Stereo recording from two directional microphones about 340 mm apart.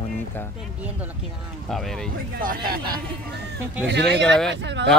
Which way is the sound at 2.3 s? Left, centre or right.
Right.